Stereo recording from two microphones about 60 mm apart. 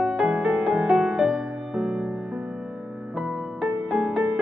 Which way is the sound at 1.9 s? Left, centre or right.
Centre.